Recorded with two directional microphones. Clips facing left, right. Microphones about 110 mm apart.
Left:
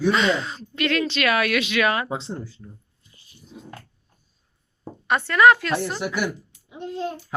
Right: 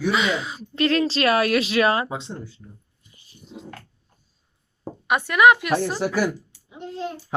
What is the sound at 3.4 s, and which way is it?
Dog, 90° right.